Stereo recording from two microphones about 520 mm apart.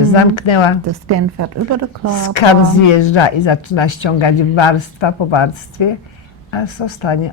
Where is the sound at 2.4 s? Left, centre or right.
Left.